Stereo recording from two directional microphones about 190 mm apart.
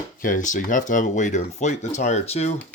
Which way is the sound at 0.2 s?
45° left (ahead or behind).